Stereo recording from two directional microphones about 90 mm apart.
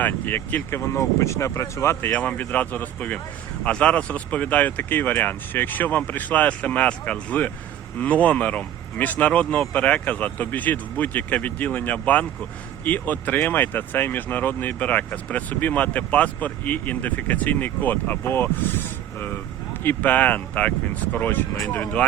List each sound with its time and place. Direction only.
0.0 s speech: 20° left (ahead or behind)
2.0 s speech: 15° left (ahead or behind)